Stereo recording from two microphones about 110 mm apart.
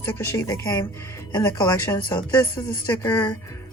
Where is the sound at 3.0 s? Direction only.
15° left (ahead or behind).